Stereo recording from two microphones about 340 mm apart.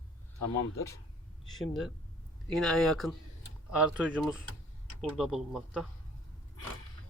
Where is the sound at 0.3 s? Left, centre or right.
Left.